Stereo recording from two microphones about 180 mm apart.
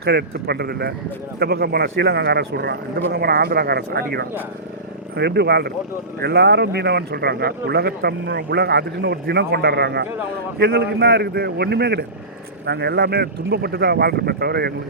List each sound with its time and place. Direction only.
0.0 s speech: 65° right (ahead or behind)
5.1 s speech: 65° right (ahead or behind)